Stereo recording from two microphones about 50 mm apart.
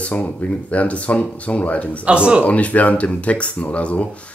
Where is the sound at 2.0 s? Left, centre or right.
Right.